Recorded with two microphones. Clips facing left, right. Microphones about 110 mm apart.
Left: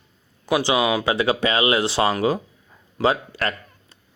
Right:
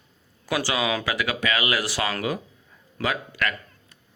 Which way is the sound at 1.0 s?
30° left (ahead or behind).